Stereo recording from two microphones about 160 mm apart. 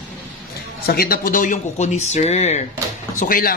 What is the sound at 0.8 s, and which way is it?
Speech, 70° left (ahead or behind).